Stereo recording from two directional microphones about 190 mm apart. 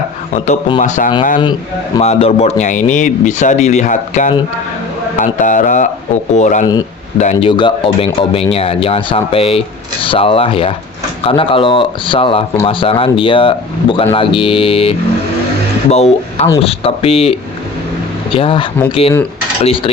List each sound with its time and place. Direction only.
0.3 s speech: 40° left (ahead or behind)